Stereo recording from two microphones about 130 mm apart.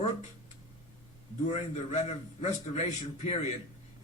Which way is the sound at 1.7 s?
60° left (ahead or behind).